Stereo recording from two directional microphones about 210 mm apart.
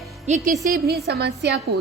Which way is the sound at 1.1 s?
50° right (ahead or behind).